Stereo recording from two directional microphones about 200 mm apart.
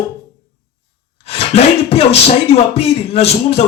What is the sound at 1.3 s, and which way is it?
Speech, 30° left (ahead or behind).